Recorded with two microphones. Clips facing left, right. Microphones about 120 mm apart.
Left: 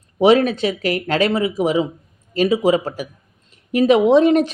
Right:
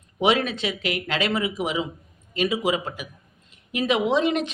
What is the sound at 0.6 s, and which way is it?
A woman's voice, 35° left (ahead or behind).